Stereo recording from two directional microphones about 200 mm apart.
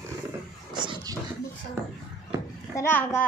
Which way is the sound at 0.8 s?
25° right (ahead or behind).